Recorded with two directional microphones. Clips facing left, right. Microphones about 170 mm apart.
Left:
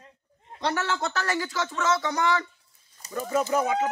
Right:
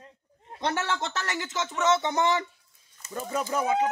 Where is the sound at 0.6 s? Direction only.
20° right (ahead or behind).